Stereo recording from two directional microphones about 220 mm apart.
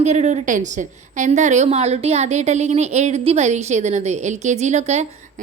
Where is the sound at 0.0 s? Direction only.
30° right (ahead or behind).